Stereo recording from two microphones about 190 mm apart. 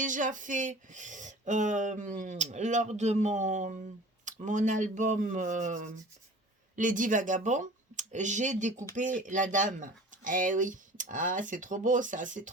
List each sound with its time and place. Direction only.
0.0 s speech: 45° right (ahead or behind)